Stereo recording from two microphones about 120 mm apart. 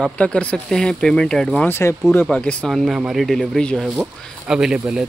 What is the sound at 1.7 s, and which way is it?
Speech, 20° left (ahead or behind).